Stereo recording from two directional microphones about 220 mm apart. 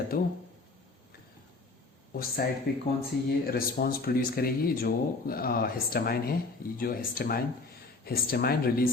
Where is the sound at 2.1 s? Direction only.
45° left (ahead or behind).